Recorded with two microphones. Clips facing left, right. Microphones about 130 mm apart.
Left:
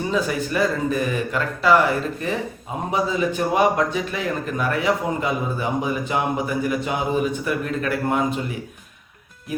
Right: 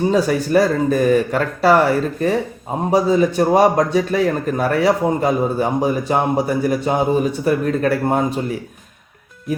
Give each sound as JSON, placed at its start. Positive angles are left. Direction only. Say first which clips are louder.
{"t": 0.1, "sound": "speech", "louder": "right 7 dB", "side_deg": -40}